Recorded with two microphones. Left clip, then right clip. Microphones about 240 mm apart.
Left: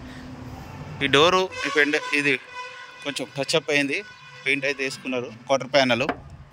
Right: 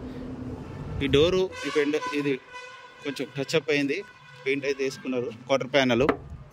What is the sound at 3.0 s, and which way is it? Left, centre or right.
Speech, centre.